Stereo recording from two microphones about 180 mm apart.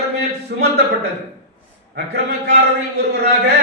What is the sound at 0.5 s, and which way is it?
Speech, 65° right (ahead or behind).